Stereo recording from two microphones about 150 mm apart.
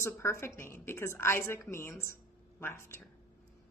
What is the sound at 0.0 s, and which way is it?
A woman's voice, 15° left (ahead or behind).